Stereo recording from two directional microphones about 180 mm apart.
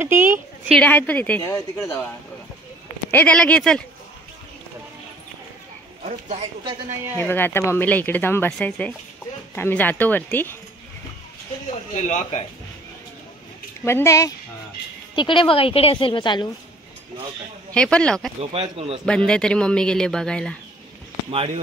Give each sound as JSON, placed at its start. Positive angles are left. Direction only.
{"t": 0.0, "sound": "a sound", "side_deg": -15}
{"t": 0.7, "sound": "speech", "side_deg": 5}
{"t": 3.1, "sound": "speech", "side_deg": 10}
{"t": 6.0, "sound": "speech", "side_deg": -40}
{"t": 7.2, "sound": "speech", "side_deg": 10}
{"t": 11.9, "sound": "speech", "side_deg": 40}
{"t": 13.8, "sound": "speech", "side_deg": 15}
{"t": 15.1, "sound": "a woman's voice", "side_deg": 30}
{"t": 17.7, "sound": "speech", "side_deg": 5}
{"t": 18.4, "sound": "speech", "side_deg": -35}
{"t": 19.0, "sound": "speech", "side_deg": 5}